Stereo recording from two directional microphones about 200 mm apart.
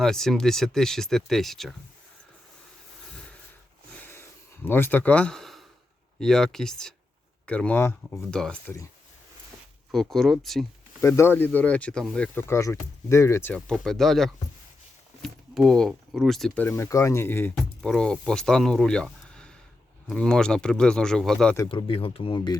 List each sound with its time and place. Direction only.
0.0 s speech: centre (ahead or behind)
4.0 s a sound: 10° left (ahead or behind)
6.1 s speech: centre (ahead or behind)
9.9 s speech: centre (ahead or behind)
11.0 s speech: 10° left (ahead or behind)
21.5 s speech: 20° left (ahead or behind)